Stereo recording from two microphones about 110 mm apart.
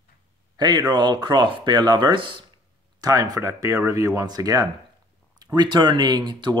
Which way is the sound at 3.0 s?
35° right (ahead or behind).